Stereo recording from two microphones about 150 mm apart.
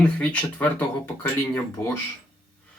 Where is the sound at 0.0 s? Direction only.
10° left (ahead or behind).